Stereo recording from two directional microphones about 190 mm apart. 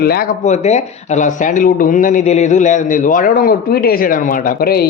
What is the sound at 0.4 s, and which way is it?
Speech, 40° left (ahead or behind).